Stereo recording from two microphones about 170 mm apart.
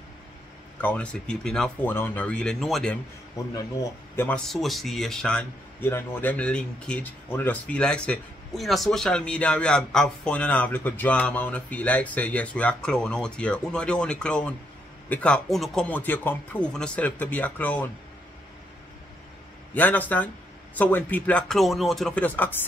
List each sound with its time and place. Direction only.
0.7 s speech: 10° left (ahead or behind)
3.5 s speech: 20° left (ahead or behind)
4.3 s speech: centre (ahead or behind)
19.7 s speech: 10° left (ahead or behind)